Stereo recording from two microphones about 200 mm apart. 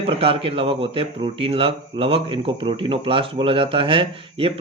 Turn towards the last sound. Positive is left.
turn(degrees=-25)  # may be behind; listen again after turning